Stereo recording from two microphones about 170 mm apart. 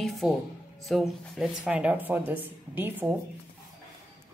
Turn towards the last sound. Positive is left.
turn(degrees=-10)  # may be behind; listen again after turning